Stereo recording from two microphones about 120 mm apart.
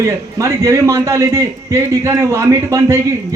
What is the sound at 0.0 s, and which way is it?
A man's voice, 25° right (ahead or behind).